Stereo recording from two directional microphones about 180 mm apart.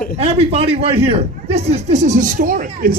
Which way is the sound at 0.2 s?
35° right (ahead or behind).